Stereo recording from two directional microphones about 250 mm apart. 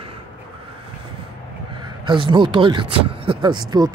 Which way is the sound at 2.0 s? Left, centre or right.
Centre.